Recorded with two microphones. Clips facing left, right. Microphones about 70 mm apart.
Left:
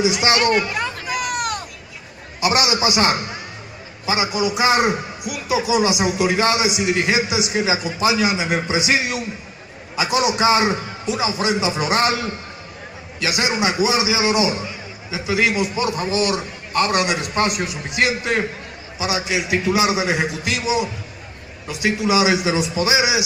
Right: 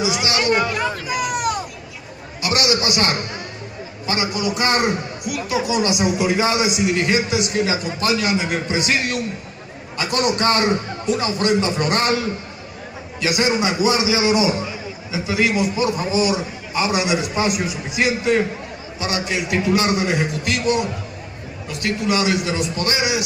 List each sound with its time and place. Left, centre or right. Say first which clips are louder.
0.0 s speech: left 3 dB; left
0.7 s hubbub: right 2 dB; centre
2.4 s a man's voice: left 2 dB; centre